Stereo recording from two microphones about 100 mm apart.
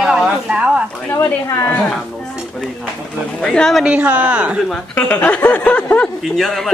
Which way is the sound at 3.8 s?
15° right (ahead or behind).